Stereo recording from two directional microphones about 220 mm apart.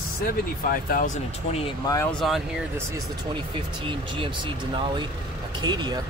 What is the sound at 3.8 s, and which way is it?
Speech, 20° right (ahead or behind).